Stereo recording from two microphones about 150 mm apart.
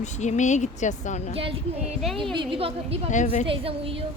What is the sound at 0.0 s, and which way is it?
A woman's voice, 50° left (ahead or behind).